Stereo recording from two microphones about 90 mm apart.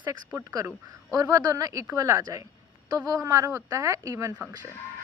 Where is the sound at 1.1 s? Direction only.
40° right (ahead or behind).